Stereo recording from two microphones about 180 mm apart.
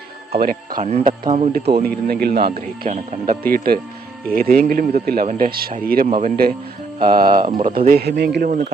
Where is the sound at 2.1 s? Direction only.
60° right (ahead or behind).